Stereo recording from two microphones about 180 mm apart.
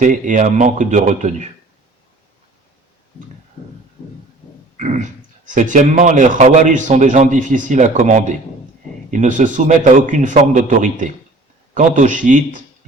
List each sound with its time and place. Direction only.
0.0 s speech: 45° right (ahead or behind)
4.8 s speech: 40° right (ahead or behind)